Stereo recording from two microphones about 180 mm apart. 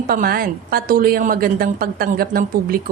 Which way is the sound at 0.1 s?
55° right (ahead or behind).